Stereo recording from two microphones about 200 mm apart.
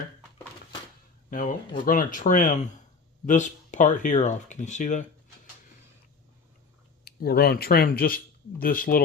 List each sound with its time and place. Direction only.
1.3 s speech: 40° left (ahead or behind)
7.0 s speech: 55° left (ahead or behind)